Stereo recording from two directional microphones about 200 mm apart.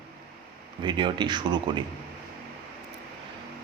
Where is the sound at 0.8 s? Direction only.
25° right (ahead or behind).